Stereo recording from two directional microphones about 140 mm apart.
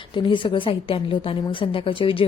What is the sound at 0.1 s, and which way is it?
A woman's voice, 35° left (ahead or behind).